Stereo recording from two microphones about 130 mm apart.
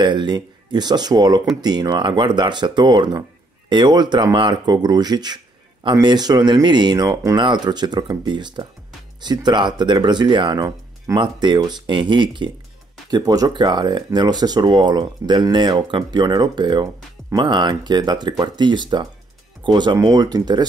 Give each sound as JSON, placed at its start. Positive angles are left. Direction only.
{"t": 0.0, "sound": "speech", "side_deg": -35}